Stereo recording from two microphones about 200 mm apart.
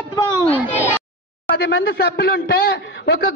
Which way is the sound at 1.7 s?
50° left (ahead or behind).